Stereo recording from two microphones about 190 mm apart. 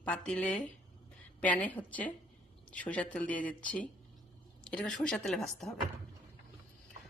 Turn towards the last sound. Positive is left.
turn(degrees=0)  # may be behind; listen again after turning